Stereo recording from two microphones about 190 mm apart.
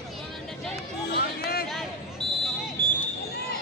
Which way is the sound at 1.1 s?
55° left (ahead or behind).